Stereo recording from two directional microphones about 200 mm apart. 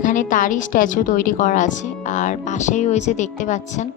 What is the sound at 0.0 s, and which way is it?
A woman's voice, 40° left (ahead or behind).